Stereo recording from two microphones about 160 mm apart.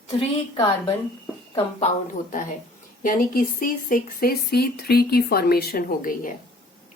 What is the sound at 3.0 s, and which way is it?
Speech, 60° left (ahead or behind).